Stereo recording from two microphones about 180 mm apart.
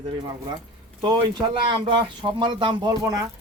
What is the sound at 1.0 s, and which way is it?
Speech, 25° right (ahead or behind).